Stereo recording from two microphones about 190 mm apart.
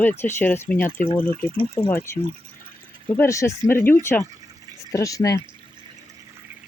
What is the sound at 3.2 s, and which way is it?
Speech, 15° left (ahead or behind).